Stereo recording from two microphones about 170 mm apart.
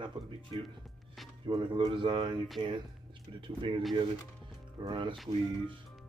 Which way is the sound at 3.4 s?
30° right (ahead or behind).